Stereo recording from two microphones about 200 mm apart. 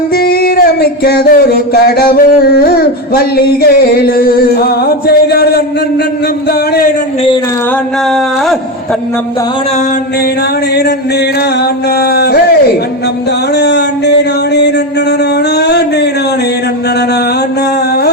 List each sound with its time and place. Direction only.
0.2 s music: 50° left (ahead or behind)
12.1 s music: 50° left (ahead or behind)
13.6 s a sound: 55° left (ahead or behind)